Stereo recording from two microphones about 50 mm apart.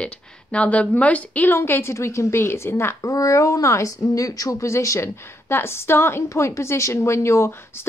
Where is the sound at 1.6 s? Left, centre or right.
Left.